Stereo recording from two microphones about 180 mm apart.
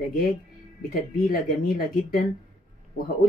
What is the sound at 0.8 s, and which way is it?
A woman's voice, 55° left (ahead or behind).